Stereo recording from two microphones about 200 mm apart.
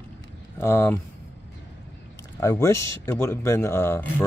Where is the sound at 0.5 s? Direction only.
10° left (ahead or behind).